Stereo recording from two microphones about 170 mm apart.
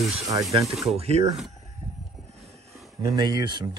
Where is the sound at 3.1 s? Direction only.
25° right (ahead or behind).